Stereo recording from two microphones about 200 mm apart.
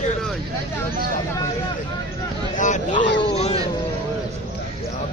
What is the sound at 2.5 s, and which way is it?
Speech, 40° left (ahead or behind).